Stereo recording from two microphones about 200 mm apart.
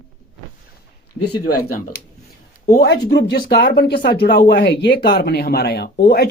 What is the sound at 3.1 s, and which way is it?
Speech, 60° left (ahead or behind).